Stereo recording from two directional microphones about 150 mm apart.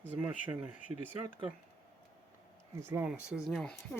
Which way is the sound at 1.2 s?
35° right (ahead or behind).